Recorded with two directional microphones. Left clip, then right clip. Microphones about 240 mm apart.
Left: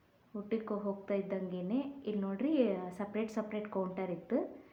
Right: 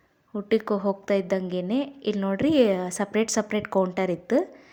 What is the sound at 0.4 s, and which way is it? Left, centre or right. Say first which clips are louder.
A woman's voice: right 13 dB; right.